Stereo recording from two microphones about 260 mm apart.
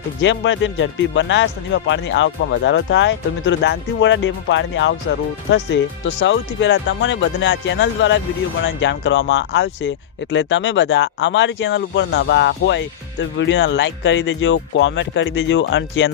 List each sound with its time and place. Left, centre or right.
0.2 s speech: left